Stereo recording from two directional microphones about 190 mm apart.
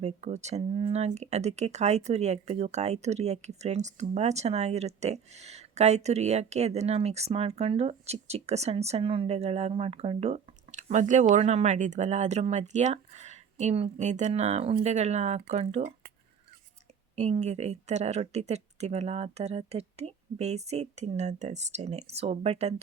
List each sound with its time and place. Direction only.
0.0 s speech: 35° right (ahead or behind)
17.2 s speech: 35° right (ahead or behind)